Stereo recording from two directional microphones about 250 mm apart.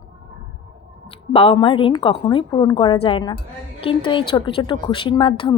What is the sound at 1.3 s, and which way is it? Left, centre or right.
A woman's voice, left.